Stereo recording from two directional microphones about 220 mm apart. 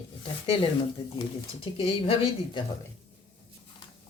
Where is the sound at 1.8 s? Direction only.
25° left (ahead or behind).